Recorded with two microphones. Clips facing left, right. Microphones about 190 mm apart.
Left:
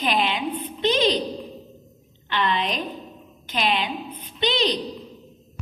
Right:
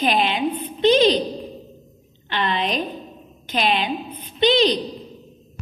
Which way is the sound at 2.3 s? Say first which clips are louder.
Right 1 dB; 30° right (ahead or behind).